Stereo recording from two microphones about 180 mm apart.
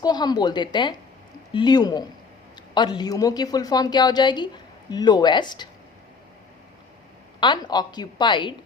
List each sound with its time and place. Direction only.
0.0 s a woman's voice: 20° left (ahead or behind)
7.3 s a woman's voice: 25° left (ahead or behind)